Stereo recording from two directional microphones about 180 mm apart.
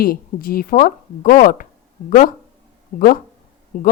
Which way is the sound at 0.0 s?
55° left (ahead or behind).